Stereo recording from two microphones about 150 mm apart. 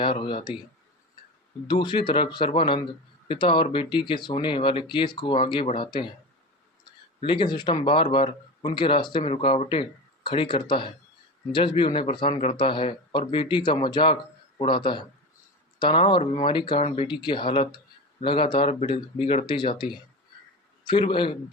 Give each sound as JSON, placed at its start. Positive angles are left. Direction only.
{"t": 0.0, "sound": "speech", "side_deg": 35}
{"t": 1.6, "sound": "speech", "side_deg": 30}
{"t": 12.3, "sound": "speech", "side_deg": 45}
{"t": 12.5, "sound": "speech", "side_deg": 35}
{"t": 18.7, "sound": "speech", "side_deg": 45}